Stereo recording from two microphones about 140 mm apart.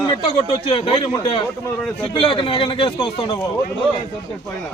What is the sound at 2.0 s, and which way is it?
Speech, 40° left (ahead or behind).